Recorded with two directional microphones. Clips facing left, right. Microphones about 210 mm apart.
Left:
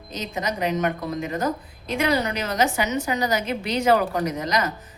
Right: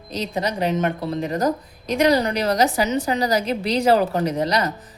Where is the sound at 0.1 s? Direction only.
35° right (ahead or behind).